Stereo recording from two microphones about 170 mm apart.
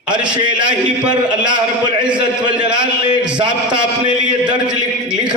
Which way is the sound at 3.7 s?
5° right (ahead or behind).